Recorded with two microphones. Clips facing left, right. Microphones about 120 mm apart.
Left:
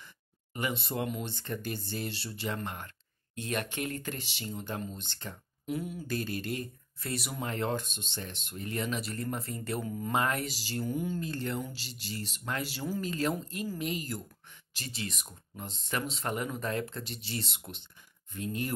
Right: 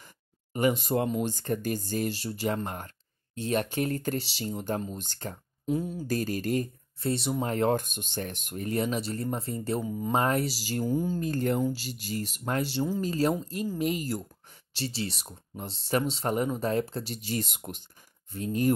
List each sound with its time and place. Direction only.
0.0 s speech: 45° right (ahead or behind)
3.3 s speech: 35° right (ahead or behind)
7.0 s speech: 30° right (ahead or behind)
7.4 s speech: 45° right (ahead or behind)
9.8 s speech: 15° right (ahead or behind)
10.1 s speech: 35° right (ahead or behind)
11.1 s speech: 50° right (ahead or behind)
12.6 s speech: 25° right (ahead or behind)
13.0 s speech: 35° right (ahead or behind)
13.3 s speech: centre (ahead or behind)
13.7 s speech: 45° right (ahead or behind)
14.7 s speech: 30° right (ahead or behind)